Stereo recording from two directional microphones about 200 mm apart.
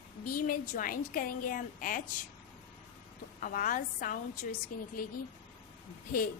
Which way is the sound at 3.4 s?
45° left (ahead or behind).